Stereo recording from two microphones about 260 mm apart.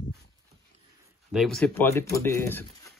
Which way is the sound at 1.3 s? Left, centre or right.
Centre.